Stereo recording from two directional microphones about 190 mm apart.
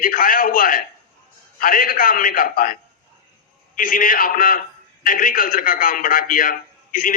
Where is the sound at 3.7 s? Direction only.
45° left (ahead or behind).